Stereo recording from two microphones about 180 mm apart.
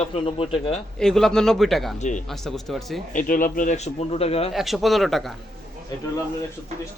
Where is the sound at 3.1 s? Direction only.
50° left (ahead or behind); by 4.5 s 35° left (ahead or behind).